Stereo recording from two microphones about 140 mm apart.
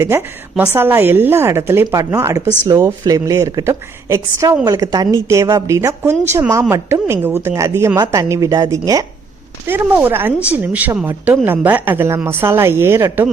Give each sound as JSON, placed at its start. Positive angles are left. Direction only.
{"t": 0.0, "sound": "a woman's voice", "side_deg": -20}